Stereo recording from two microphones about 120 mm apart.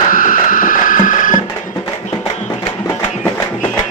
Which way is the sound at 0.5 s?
90° left.